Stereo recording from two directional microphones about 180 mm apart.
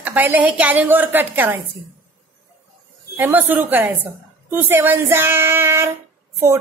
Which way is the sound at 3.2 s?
10° right (ahead or behind).